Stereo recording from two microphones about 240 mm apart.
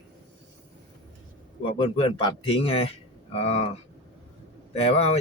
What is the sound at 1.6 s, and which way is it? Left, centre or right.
Speech, left.